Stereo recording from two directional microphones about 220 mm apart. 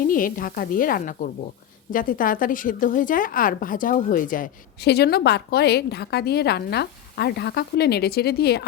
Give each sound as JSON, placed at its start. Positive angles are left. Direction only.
{"t": 0.1, "sound": "a woman's voice", "side_deg": 40}